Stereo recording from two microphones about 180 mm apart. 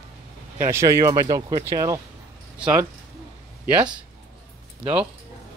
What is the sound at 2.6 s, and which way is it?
Speech, 5° right (ahead or behind).